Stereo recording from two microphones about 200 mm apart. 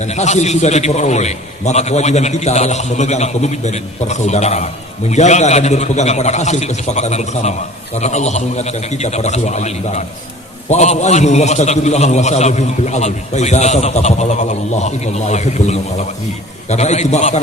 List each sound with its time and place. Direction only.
0.0 s a man's voice: 35° left (ahead or behind)